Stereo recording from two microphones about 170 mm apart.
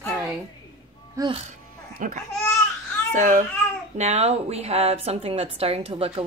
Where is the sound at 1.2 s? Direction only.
20° right (ahead or behind).